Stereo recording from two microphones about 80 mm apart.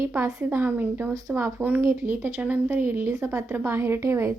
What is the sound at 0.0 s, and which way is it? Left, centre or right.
A woman's voice, right.